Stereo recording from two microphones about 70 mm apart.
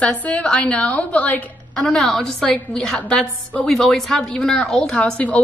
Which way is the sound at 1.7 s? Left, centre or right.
Centre.